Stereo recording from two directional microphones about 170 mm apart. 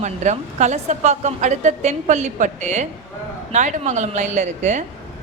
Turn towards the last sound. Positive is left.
turn(degrees=-45)  # may be behind; listen again after turning